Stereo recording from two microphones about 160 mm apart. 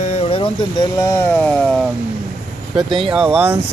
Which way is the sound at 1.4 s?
Centre (ahead or behind).